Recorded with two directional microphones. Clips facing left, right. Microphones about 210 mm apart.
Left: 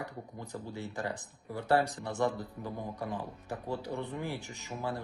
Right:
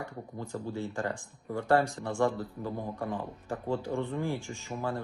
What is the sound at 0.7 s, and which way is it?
Speech, 20° left (ahead or behind).